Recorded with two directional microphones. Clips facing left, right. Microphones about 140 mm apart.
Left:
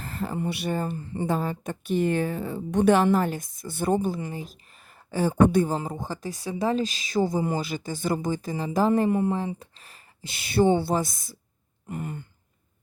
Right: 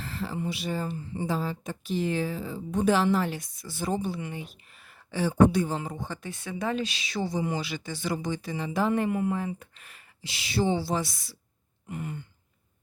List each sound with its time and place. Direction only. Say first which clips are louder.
0.0 s speech: left 3 dB; 50° left (ahead or behind)
10.4 s speech: left 6 dB; 50° left (ahead or behind)